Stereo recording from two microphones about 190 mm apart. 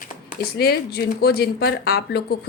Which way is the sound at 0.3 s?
55° left (ahead or behind).